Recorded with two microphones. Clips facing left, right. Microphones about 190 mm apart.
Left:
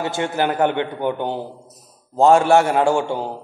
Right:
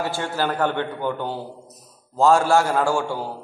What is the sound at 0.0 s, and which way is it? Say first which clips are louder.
A man's voice: left 3 dB; 20° left (ahead or behind).